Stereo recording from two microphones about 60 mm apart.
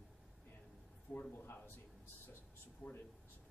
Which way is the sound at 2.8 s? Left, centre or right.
Left.